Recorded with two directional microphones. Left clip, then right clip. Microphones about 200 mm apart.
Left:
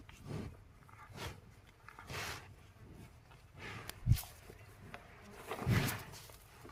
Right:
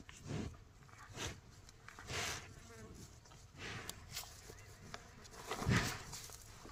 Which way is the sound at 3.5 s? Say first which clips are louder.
Even; 15° right (ahead or behind).